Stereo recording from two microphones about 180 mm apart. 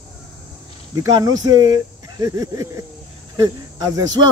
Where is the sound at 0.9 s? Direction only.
20° right (ahead or behind).